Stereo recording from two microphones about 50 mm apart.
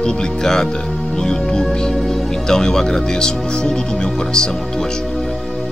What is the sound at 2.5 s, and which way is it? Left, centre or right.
Speech, centre.